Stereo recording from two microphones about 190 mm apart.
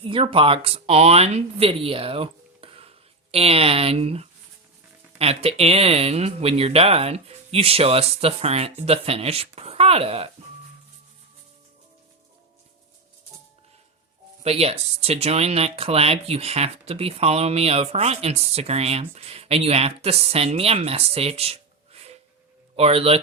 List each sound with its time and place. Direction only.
0.0 s speech: 30° right (ahead or behind)
14.4 s speech: 30° right (ahead or behind)